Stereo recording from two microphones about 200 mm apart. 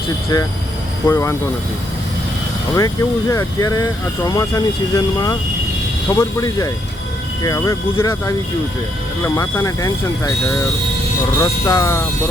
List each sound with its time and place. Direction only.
1.0 s speech: 15° left (ahead or behind)
2.7 s speech: 15° left (ahead or behind)
11.3 s speech: 20° left (ahead or behind)